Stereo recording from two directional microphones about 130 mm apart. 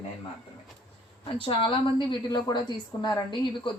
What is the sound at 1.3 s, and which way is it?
A woman's voice, 40° left (ahead or behind).